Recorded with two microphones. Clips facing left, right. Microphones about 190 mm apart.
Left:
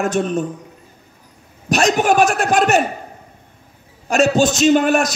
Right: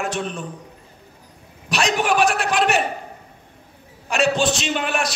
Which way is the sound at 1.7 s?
45° left (ahead or behind).